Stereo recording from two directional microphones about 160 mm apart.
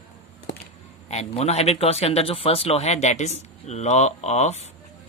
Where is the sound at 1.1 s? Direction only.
40° left (ahead or behind).